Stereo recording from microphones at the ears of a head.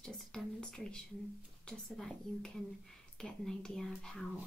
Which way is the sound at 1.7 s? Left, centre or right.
Centre.